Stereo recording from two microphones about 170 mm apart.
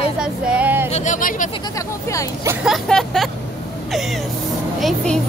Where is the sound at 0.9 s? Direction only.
45° left (ahead or behind).